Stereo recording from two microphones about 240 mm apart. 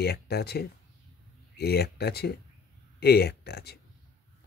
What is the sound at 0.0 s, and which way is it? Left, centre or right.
Speech, left.